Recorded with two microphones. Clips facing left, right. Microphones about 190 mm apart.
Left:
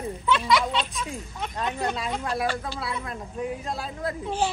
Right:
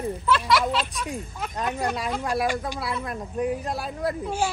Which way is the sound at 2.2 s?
15° right (ahead or behind).